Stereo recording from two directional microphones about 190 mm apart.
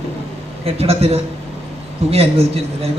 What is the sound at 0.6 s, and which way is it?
A man's voice, 30° right (ahead or behind).